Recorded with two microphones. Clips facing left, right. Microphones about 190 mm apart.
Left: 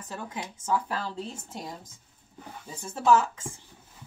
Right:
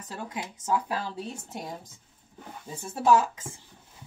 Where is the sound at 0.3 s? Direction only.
15° right (ahead or behind).